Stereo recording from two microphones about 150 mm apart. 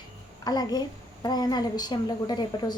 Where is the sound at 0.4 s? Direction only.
25° left (ahead or behind).